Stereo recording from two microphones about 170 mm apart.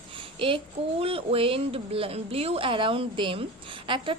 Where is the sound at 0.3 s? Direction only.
30° right (ahead or behind).